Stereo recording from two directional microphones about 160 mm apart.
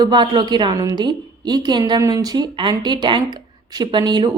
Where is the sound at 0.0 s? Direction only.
30° right (ahead or behind).